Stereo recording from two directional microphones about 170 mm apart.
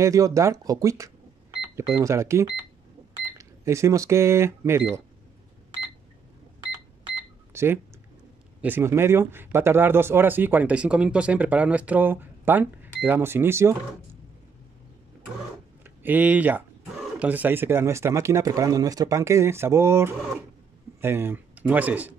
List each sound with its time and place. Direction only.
0.0 s speech: 20° right (ahead or behind)
7.5 s speech: 15° right (ahead or behind)
15.8 s speech: 10° right (ahead or behind)